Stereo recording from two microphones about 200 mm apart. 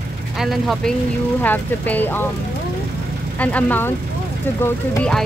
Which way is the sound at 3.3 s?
5° left (ahead or behind).